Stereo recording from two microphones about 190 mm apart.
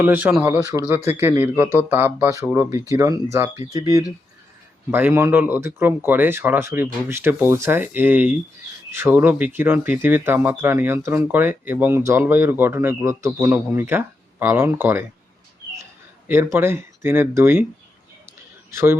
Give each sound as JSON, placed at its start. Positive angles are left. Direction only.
{"t": 0.0, "sound": "speech", "side_deg": -10}
{"t": 16.3, "sound": "speech", "side_deg": -10}
{"t": 18.7, "sound": "speech", "side_deg": -15}